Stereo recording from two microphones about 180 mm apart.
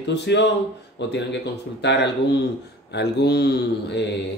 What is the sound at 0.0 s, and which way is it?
Speech, 75° left (ahead or behind).